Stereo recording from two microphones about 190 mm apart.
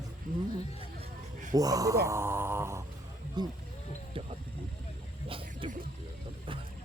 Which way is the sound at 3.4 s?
25° right (ahead or behind).